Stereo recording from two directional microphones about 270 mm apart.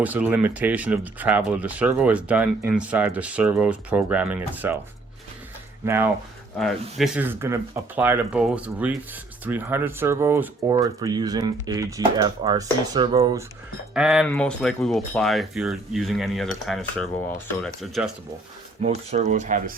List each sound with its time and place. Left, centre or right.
0.0 s speech: centre
5.8 s speech: centre
13.9 s speech: centre
18.8 s speech: right